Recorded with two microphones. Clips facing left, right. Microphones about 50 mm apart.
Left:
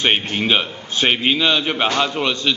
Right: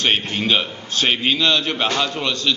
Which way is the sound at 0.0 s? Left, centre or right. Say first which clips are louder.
Left 1 dB; centre.